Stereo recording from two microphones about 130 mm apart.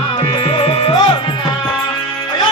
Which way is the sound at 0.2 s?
45° left (ahead or behind).